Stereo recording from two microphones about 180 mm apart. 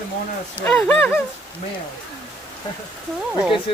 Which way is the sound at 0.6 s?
5° left (ahead or behind).